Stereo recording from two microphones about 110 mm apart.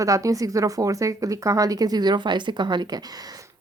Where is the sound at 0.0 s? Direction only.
30° right (ahead or behind).